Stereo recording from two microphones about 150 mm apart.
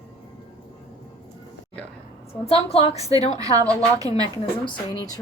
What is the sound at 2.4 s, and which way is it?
Speech, 40° left (ahead or behind).